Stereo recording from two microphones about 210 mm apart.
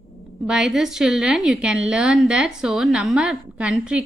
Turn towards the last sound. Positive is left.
turn(degrees=-5)  # may be behind; listen again after turning